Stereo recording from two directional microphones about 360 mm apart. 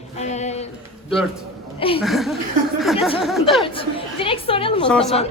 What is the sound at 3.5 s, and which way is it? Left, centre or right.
A woman's voice, centre.